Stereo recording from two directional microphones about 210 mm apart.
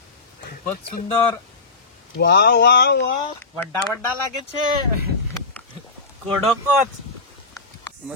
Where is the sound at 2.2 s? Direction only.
50° left (ahead or behind).